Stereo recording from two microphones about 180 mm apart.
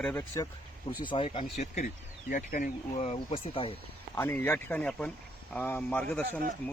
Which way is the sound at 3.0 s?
30° left (ahead or behind).